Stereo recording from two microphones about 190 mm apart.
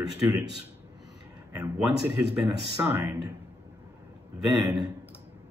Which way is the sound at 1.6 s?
5° right (ahead or behind).